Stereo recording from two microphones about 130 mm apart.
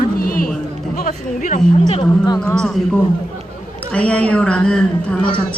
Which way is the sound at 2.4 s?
5° left (ahead or behind).